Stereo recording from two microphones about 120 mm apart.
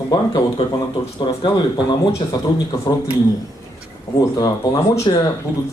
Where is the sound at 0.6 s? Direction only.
45° left (ahead or behind).